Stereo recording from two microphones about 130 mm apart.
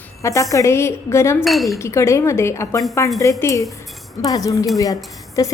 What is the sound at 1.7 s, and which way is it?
A woman's voice, 20° left (ahead or behind).